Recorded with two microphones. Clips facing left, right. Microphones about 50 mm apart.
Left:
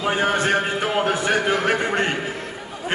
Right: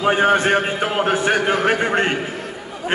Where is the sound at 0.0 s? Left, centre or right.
Right.